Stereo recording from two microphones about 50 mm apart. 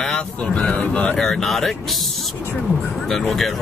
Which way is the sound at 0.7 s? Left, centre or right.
Left.